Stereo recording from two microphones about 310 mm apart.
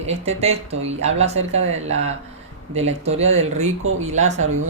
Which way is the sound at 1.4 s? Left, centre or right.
Right.